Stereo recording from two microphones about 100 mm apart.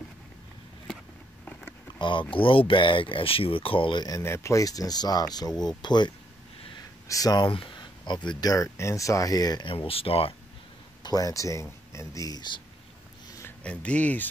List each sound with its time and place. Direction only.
1.4 s a sound: 15° left (ahead or behind)
2.0 s speech: 55° left (ahead or behind)
4.2 s speech: 25° left (ahead or behind); by 6.1 s 50° left (ahead or behind)
7.1 s speech: 40° left (ahead or behind)
7.4 s speech: 55° left (ahead or behind); by 9.7 s 40° left (ahead or behind)
9.7 s speech: 70° left (ahead or behind)
11.0 s speech: 40° left (ahead or behind)
13.7 s speech: 15° left (ahead or behind)